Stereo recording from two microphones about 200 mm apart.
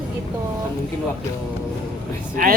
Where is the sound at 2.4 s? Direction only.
45° right (ahead or behind).